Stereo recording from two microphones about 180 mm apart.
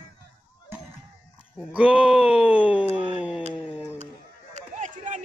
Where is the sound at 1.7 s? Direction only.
5° right (ahead or behind).